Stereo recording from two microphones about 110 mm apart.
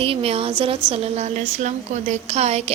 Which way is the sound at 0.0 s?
60° right (ahead or behind).